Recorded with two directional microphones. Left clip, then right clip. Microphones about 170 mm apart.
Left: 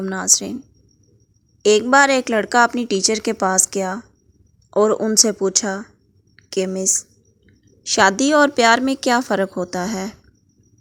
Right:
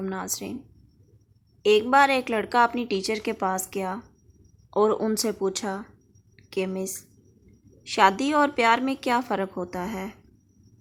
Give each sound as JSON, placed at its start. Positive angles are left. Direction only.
{"t": 0.0, "sound": "a woman's voice", "side_deg": 35}
{"t": 1.6, "sound": "a woman's voice", "side_deg": 35}
{"t": 6.3, "sound": "a sound", "side_deg": 30}
{"t": 6.7, "sound": "a woman's voice", "side_deg": 30}